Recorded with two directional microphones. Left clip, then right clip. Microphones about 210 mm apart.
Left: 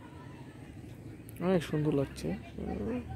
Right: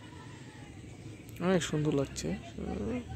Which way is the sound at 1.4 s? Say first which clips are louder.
Even; centre (ahead or behind).